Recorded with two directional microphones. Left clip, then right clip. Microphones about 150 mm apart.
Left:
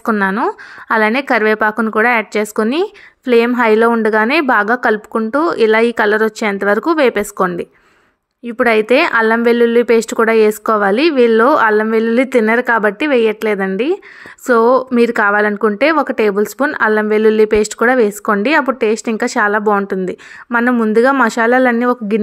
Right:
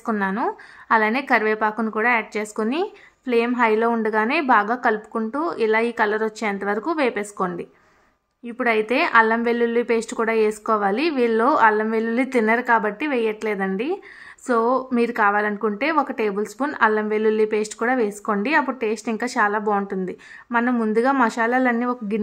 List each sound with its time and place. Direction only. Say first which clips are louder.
0.2 s speech: left 8 dB; 30° left (ahead or behind)